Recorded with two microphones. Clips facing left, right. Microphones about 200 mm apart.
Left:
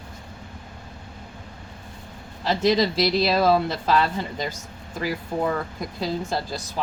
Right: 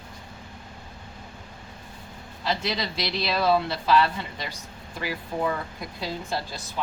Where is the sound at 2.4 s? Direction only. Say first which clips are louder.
Left 8 dB; 40° left (ahead or behind).